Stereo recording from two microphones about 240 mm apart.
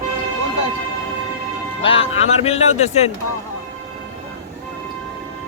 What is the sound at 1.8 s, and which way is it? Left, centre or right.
Speech, left.